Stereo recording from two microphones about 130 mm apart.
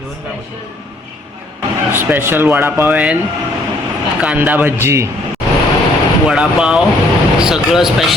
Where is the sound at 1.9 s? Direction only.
15° right (ahead or behind).